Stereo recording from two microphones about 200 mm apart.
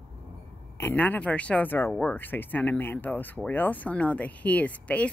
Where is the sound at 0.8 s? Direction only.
10° left (ahead or behind).